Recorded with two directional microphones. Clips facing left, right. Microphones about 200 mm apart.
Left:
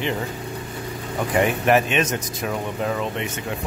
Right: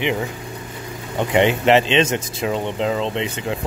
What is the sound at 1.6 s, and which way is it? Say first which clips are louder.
Speech: right 3 dB; 25° right (ahead or behind).